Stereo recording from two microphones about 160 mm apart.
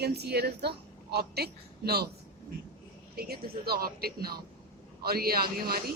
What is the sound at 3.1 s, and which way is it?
Speech, 75° right (ahead or behind).